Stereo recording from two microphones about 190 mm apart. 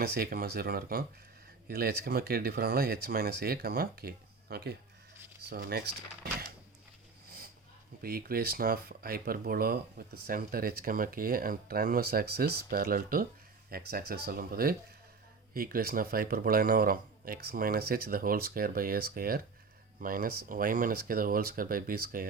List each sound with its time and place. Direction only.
0.0 s speech: 55° right (ahead or behind)
7.3 s a sound: 50° right (ahead or behind)
8.0 s speech: 50° right (ahead or behind)